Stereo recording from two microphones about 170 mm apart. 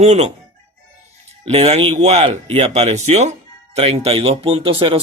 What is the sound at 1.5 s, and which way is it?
Speech, 35° right (ahead or behind).